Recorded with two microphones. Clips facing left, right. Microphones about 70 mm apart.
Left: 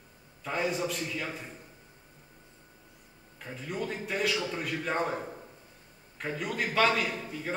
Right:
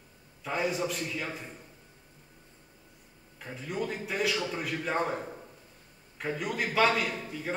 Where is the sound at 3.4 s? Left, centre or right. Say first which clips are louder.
Right 1 dB; centre.